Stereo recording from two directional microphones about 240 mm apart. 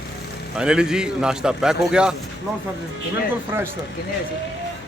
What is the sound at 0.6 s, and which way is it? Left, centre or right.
Speech, centre.